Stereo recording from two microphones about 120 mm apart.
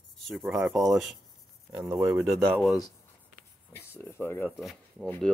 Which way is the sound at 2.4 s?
Centre (ahead or behind).